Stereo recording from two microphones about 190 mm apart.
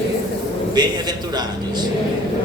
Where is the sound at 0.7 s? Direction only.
20° right (ahead or behind).